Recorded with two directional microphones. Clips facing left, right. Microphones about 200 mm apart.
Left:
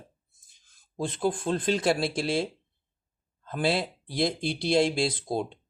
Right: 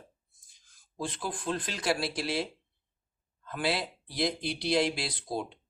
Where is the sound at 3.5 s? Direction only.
25° left (ahead or behind).